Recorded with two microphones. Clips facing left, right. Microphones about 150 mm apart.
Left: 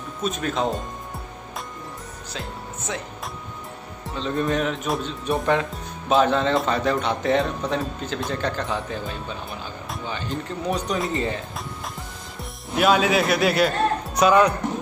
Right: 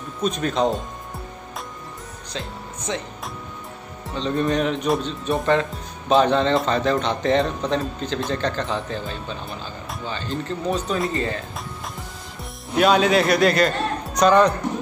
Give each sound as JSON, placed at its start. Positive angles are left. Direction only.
{"t": 0.2, "sound": "speech", "side_deg": 0}
{"t": 2.9, "sound": "speech", "side_deg": 5}
{"t": 12.7, "sound": "a man's voice", "side_deg": 0}